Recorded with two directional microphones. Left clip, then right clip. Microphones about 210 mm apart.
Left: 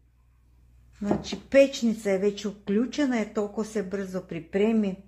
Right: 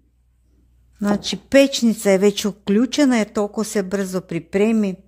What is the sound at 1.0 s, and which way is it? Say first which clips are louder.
Speech: right 7 dB; 50° right (ahead or behind).